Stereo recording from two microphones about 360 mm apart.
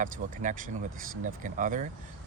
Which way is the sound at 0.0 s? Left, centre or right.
Right.